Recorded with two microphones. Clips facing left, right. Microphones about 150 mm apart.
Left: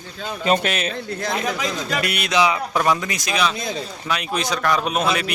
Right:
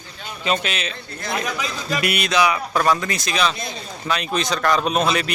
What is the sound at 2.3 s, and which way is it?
Speech, 20° left (ahead or behind).